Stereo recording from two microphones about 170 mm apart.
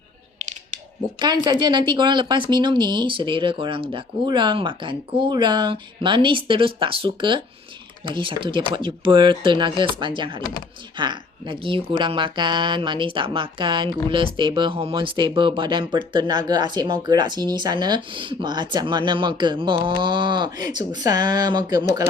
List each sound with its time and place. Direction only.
0.3 s scissors: 45° right (ahead or behind)
1.5 s speech: 25° right (ahead or behind)